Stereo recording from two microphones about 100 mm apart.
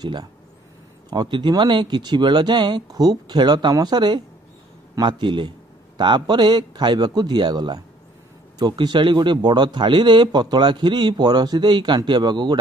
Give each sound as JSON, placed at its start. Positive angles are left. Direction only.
{"t": 0.0, "sound": "a man's voice", "side_deg": -45}